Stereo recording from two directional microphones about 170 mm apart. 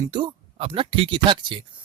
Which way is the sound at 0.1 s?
30° right (ahead or behind).